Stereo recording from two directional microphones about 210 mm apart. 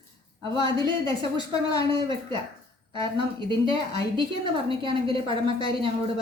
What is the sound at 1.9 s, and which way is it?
A woman's voice, 25° right (ahead or behind).